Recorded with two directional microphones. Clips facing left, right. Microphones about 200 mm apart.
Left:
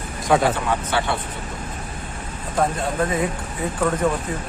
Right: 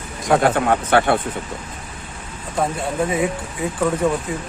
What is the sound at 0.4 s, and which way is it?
Speech, 55° right (ahead or behind).